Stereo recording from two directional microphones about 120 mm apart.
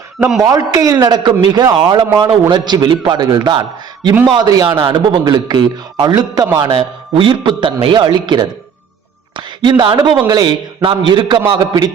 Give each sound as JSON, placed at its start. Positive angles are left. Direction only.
{"t": 0.4, "sound": "a man's voice", "side_deg": -30}
{"t": 6.7, "sound": "a man's voice", "side_deg": -50}
{"t": 9.3, "sound": "a sound", "side_deg": -40}
{"t": 10.2, "sound": "a man's voice", "side_deg": -35}